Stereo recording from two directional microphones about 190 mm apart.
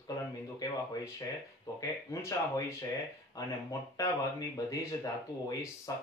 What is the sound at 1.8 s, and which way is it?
Speech, 15° left (ahead or behind).